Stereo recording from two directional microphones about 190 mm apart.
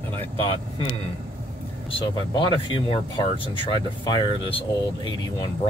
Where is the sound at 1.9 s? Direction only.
25° left (ahead or behind).